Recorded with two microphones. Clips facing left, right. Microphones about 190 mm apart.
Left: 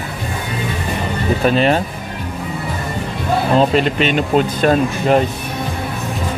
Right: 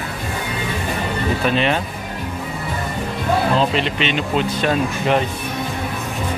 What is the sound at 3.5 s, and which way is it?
Speech, 45° left (ahead or behind).